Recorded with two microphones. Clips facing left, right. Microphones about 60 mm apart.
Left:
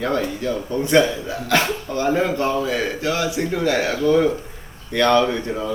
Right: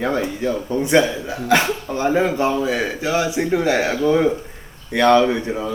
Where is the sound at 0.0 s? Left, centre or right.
Centre.